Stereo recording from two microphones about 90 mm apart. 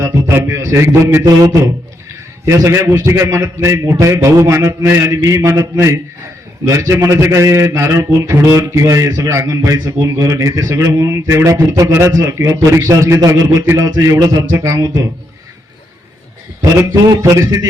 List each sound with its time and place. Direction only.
0.0 s a man's voice: 30° right (ahead or behind)
16.7 s a man's voice: 40° right (ahead or behind)